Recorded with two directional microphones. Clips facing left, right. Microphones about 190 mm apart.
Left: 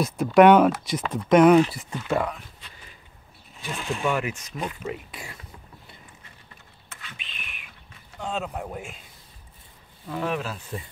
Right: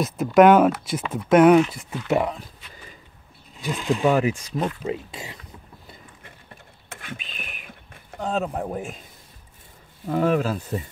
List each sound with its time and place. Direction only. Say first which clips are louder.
0.0 s speech: right 1 dB; centre (ahead or behind)
2.0 s speech: right 3 dB; 20° right (ahead or behind)
3.6 s speech: right 5 dB; 15° right (ahead or behind)
3.9 s speech: right 7 dB; 35° right (ahead or behind)
6.2 s a sound: right 5 dB; 50° right (ahead or behind)
10.0 s speech: right 7 dB; 45° right (ahead or behind)